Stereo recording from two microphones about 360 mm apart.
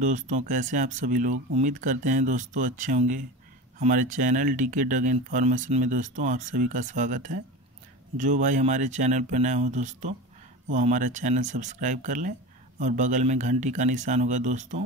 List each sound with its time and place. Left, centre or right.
0.0 s speech: right